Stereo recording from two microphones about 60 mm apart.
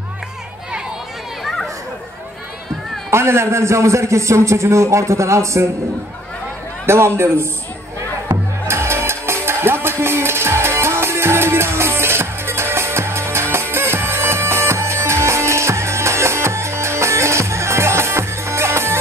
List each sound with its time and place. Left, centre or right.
3.1 s a man's voice: right
6.9 s a man's voice: right
8.6 s music: right